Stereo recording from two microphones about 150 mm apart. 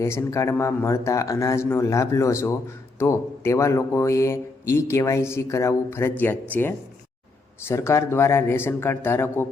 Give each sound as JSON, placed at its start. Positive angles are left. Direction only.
{"t": 0.0, "sound": "speech", "side_deg": 20}